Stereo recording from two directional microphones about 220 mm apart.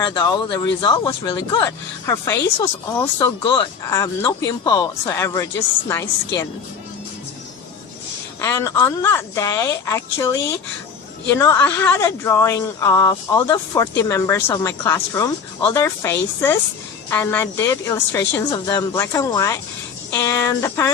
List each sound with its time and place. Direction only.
0.0 s speech: 20° left (ahead or behind)
8.4 s speech: 15° left (ahead or behind)